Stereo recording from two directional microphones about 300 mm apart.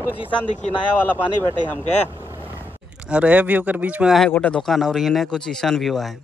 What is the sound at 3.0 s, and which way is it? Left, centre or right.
Speech, centre.